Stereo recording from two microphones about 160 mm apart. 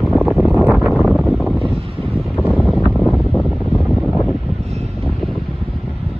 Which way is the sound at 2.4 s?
Centre (ahead or behind).